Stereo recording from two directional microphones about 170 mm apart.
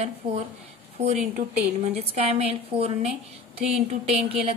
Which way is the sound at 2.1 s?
35° right (ahead or behind).